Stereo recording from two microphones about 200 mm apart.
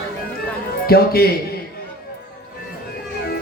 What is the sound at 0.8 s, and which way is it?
Speech, 50° left (ahead or behind).